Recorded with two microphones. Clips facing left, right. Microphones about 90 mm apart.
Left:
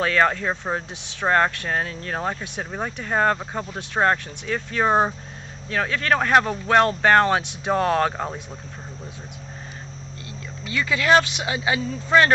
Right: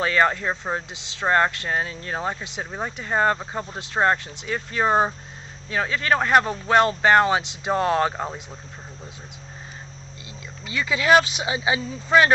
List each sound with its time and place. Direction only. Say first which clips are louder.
0.0 s speech: even; 5° right (ahead or behind)
10.6 s speech: left 1 dB; 15° right (ahead or behind)